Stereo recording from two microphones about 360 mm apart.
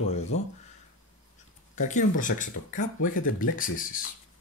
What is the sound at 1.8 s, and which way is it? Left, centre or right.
Speech, left.